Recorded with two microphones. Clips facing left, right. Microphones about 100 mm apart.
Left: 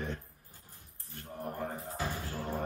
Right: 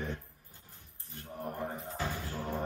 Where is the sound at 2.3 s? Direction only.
5° left (ahead or behind).